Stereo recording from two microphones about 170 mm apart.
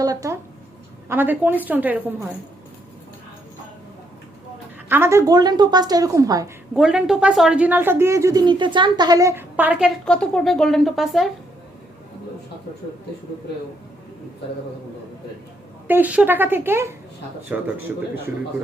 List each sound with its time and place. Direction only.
0.0 s a sound: 20° right (ahead or behind)
1.0 s speech: 10° right (ahead or behind)
4.9 s a woman's voice: 15° right (ahead or behind)
6.7 s speech: 5° right (ahead or behind)
10.1 s a woman's voice: 5° left (ahead or behind)
15.9 s speech: 10° right (ahead or behind)